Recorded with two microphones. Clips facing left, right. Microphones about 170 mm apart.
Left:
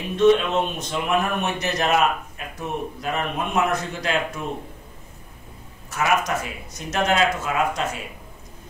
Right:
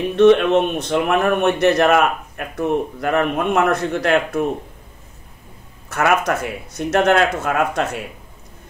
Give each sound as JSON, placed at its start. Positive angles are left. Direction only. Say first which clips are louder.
{"t": 0.1, "sound": "speech", "louder": "right 5 dB", "side_deg": -65}
{"t": 5.9, "sound": "speech", "louder": "right 5 dB", "side_deg": -60}